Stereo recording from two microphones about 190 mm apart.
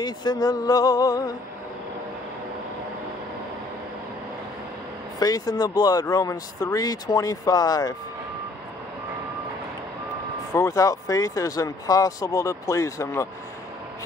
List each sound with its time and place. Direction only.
0.0 s speech: 20° left (ahead or behind)
5.2 s speech: 20° left (ahead or behind)
10.5 s speech: 15° left (ahead or behind)